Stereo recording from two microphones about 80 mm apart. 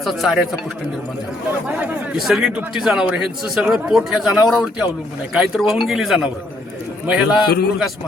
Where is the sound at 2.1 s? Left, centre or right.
Centre.